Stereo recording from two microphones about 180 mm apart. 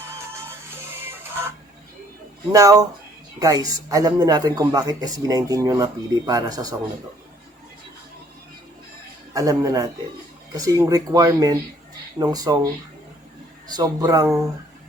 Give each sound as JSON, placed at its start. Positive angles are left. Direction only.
{"t": 1.0, "sound": "music", "side_deg": -15}
{"t": 2.5, "sound": "speech", "side_deg": -20}
{"t": 9.3, "sound": "speech", "side_deg": -20}
{"t": 13.7, "sound": "speech", "side_deg": -20}